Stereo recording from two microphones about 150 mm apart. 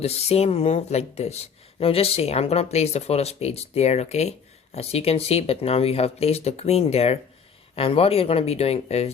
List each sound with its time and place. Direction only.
0.0 s speech: 45° left (ahead or behind)